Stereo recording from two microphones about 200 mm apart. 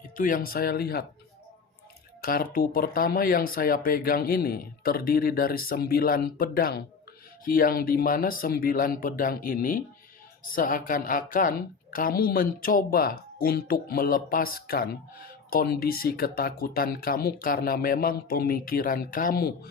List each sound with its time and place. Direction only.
0.2 s a woman's voice: 45° left (ahead or behind)
2.2 s a woman's voice: 45° left (ahead or behind)